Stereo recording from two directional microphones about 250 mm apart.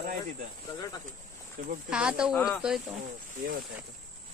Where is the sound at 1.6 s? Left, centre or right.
Right.